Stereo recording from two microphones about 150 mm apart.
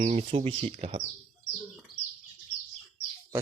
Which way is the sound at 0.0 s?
45° right (ahead or behind).